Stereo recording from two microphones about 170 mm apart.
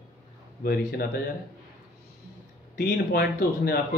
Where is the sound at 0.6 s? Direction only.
65° left (ahead or behind).